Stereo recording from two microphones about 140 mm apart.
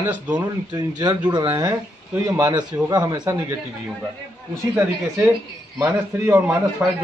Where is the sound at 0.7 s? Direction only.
30° right (ahead or behind).